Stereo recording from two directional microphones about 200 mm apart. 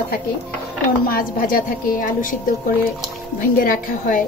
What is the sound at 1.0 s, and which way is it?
A woman's voice, 45° left (ahead or behind).